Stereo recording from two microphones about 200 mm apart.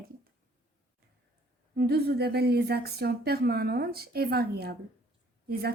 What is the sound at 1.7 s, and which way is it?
Speech, 50° right (ahead or behind).